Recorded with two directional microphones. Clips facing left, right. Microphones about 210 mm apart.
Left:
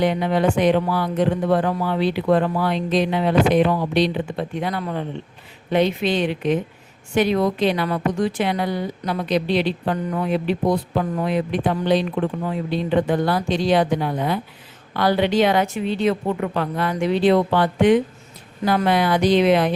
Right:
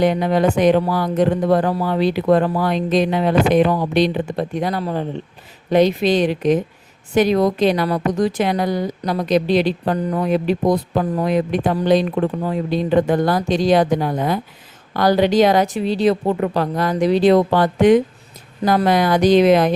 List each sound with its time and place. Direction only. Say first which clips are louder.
0.0 s a woman's voice: right 3 dB; 40° right (ahead or behind)